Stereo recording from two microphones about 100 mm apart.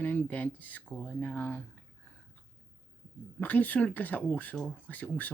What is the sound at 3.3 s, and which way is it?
Speech, 15° left (ahead or behind).